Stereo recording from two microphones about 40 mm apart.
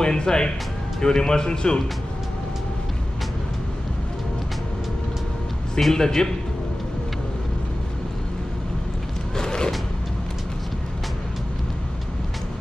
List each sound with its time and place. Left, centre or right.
0.0 s speech: centre
5.8 s a man's voice: centre
9.4 s a sound: centre